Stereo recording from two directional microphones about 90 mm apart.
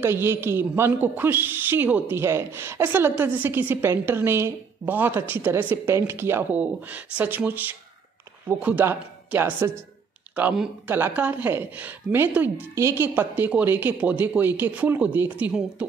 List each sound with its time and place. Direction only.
0.0 s a woman's voice: 30° right (ahead or behind)